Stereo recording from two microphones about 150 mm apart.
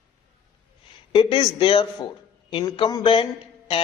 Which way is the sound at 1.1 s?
35° left (ahead or behind).